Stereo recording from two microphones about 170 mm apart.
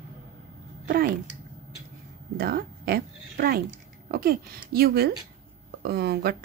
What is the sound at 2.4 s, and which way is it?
Speech, 65° right (ahead or behind).